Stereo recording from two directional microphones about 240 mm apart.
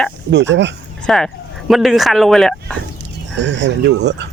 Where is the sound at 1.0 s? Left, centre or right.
Centre.